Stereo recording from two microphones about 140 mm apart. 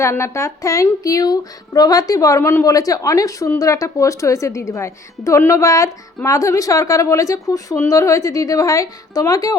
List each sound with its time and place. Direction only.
0.0 s speech: 20° left (ahead or behind)